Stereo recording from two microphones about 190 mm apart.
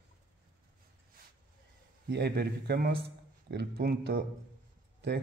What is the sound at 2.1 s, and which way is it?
Speech, 60° right (ahead or behind).